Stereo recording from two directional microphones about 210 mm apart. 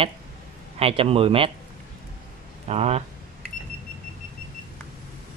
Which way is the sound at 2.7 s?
30° right (ahead or behind).